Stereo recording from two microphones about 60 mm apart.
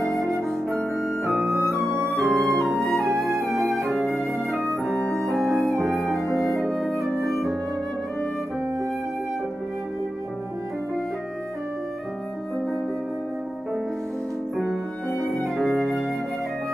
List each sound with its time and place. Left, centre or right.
0.2 s music: centre
1.6 s flute: centre
2.3 s music: centre
4.9 s music: centre
5.4 s music: centre
6.3 s flute: centre
15.1 s music: centre